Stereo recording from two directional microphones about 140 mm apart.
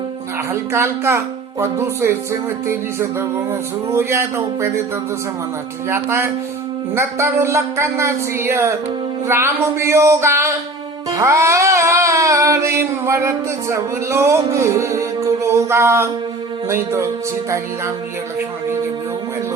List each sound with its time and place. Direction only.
0.7 s music: 20° right (ahead or behind)
5.9 s music: 20° right (ahead or behind)
15.4 s mantra: 20° right (ahead or behind)
16.6 s music: 20° right (ahead or behind)